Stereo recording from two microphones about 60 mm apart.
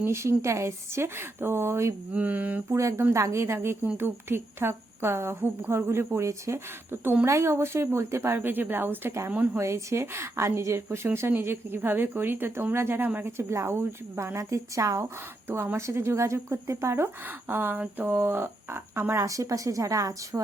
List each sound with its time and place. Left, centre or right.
0.0 s a woman's voice: right
2.1 s a sound: right
2.6 s a woman's voice: right
6.9 s speech: right
7.3 s a woman's voice: right
8.4 s speech: right
9.6 s a woman's voice: right
13.2 s a woman's voice: right
15.4 s a woman's voice: right
17.5 s speech: right
19.2 s a woman's voice: right